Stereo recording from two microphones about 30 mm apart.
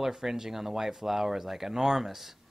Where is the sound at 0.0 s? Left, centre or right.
Centre.